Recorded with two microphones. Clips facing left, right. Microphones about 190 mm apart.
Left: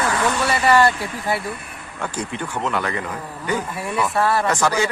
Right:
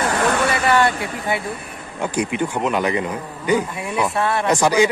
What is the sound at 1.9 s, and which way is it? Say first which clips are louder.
Speech: right 6 dB; 15° right (ahead or behind).